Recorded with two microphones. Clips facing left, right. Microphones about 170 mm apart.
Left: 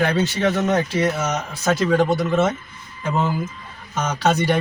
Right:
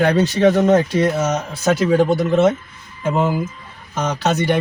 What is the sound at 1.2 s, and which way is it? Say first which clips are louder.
Speech: right 4 dB; 30° right (ahead or behind).